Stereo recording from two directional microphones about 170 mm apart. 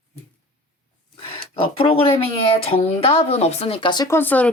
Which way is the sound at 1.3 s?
30° left (ahead or behind).